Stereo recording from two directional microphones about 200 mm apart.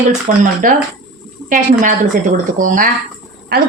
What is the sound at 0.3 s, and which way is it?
A woman's voice, 35° right (ahead or behind).